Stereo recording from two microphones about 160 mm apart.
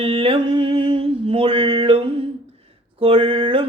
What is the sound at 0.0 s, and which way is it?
Mantra, 35° right (ahead or behind).